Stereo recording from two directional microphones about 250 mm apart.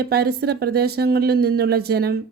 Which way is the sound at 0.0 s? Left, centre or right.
Right.